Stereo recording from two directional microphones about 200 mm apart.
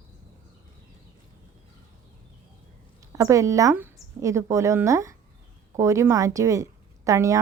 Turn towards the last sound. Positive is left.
turn(degrees=-15)  # may be behind; listen again after turning